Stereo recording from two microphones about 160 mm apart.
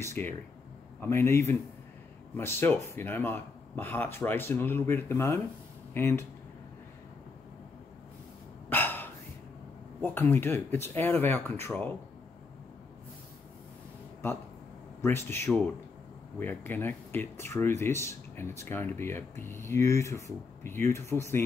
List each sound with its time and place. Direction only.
0.0 s speech: 15° left (ahead or behind)
8.6 s a sound: 10° left (ahead or behind)
10.0 s speech: 15° left (ahead or behind)
15.0 s speech: 15° left (ahead or behind)